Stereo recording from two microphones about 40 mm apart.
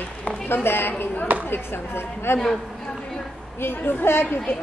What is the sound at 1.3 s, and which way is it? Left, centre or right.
Speech, right.